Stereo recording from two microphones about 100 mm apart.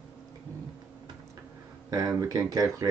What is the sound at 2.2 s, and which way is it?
Speech, 35° right (ahead or behind).